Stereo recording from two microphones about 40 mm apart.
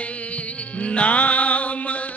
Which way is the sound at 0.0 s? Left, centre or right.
Left.